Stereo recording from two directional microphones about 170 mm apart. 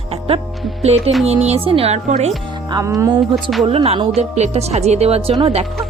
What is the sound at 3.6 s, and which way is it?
A woman's voice, 35° right (ahead or behind).